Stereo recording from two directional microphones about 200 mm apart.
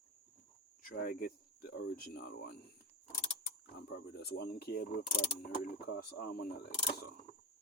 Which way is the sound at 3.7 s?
50° left (ahead or behind).